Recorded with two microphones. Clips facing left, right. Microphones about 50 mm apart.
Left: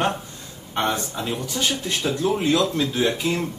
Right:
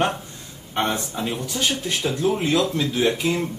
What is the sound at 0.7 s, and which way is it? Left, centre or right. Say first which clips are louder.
Speech: even; centre.